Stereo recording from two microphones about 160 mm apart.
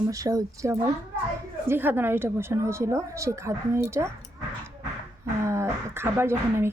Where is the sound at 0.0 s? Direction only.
20° right (ahead or behind).